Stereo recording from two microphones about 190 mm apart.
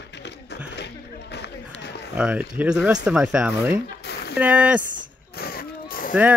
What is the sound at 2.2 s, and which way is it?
Speech, 5° right (ahead or behind).